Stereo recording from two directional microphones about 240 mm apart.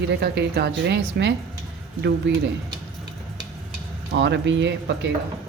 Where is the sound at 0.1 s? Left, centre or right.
Right.